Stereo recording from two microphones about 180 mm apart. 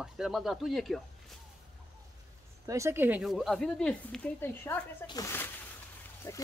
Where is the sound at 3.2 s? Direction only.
Centre (ahead or behind).